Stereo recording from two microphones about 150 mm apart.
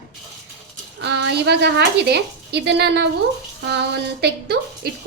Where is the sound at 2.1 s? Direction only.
90° right.